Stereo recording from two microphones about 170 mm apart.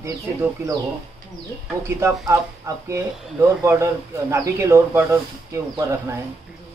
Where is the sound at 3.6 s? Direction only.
15° right (ahead or behind).